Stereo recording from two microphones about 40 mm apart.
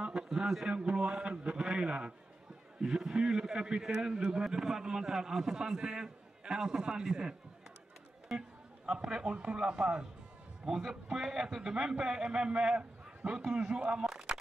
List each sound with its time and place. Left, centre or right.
0.1 s a sound: centre
0.7 s a man's voice: right
8.4 s a man's voice: right
10.6 s a man's voice: centre
13.5 s a man's voice: centre